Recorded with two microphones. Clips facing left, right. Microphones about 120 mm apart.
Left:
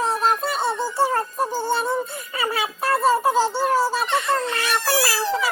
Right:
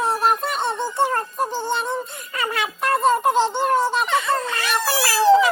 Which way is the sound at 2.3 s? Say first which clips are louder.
Even; 5° left (ahead or behind).